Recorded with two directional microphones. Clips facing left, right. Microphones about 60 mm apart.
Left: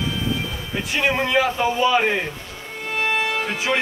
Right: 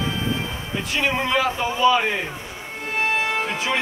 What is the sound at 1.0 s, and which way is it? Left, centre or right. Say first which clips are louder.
A man's voice: left 2 dB; centre.